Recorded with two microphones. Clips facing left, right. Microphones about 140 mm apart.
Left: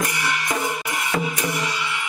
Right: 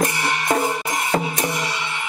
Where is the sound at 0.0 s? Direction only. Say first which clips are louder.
Right 3 dB; 30° right (ahead or behind).